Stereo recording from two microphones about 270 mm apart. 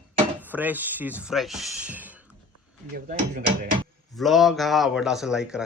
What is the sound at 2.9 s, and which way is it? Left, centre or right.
Speech, right.